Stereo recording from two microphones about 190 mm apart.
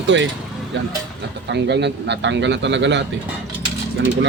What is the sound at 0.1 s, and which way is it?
Speech, 75° right (ahead or behind).